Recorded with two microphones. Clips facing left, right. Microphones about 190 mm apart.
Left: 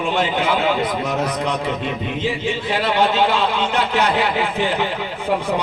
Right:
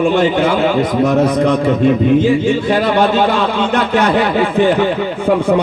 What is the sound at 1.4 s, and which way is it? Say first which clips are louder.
A man's voice: right 10 dB; 50° right (ahead or behind).